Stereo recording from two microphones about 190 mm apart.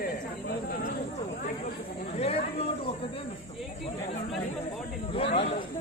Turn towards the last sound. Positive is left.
turn(degrees=30)  # may be behind; listen again after turning